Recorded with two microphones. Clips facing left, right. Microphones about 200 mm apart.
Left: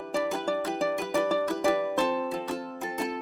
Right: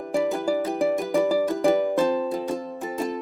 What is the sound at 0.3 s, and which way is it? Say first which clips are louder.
Music: right 5 dB; 15° right (ahead or behind).